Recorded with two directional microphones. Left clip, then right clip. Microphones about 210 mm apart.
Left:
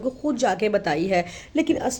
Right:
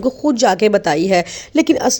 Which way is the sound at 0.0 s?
40° right (ahead or behind).